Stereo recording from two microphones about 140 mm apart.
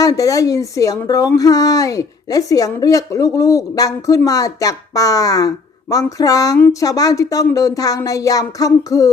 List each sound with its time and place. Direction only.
0.0 s a woman's voice: 25° left (ahead or behind)